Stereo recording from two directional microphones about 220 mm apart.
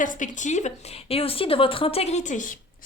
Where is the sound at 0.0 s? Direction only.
35° left (ahead or behind).